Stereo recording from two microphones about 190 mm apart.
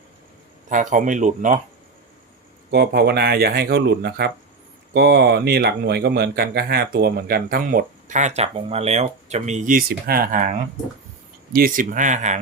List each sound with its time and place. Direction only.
0.7 s speech: 40° right (ahead or behind)
2.6 s speech: 60° right (ahead or behind); by 12.4 s 40° right (ahead or behind)